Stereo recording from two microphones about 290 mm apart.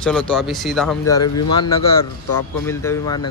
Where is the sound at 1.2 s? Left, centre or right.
Left.